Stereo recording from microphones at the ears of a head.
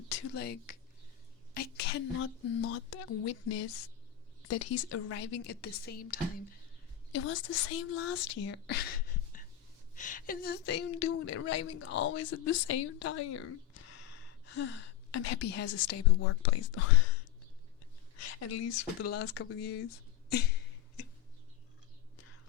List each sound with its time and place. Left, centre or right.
0.1 s a woman's voice: left